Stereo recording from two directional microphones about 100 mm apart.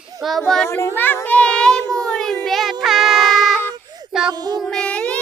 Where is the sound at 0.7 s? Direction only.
20° left (ahead or behind).